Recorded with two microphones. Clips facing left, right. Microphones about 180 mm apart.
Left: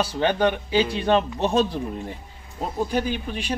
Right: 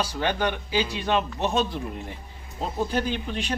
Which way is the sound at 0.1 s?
30° left (ahead or behind).